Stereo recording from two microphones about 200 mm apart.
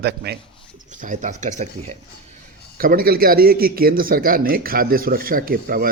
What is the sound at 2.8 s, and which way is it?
A man's voice, 45° right (ahead or behind).